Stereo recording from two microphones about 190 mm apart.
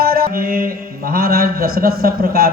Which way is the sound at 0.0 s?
50° right (ahead or behind).